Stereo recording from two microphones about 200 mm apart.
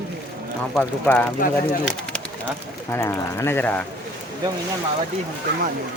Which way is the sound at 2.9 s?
15° left (ahead or behind).